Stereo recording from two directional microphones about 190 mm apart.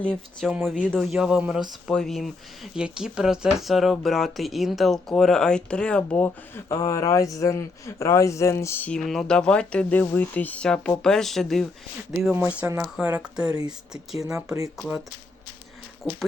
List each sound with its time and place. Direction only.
0.0 s speech: 5° left (ahead or behind)
14.3 s speech: 15° right (ahead or behind)
14.8 s speech: 5° right (ahead or behind)
16.0 s speech: 5° left (ahead or behind)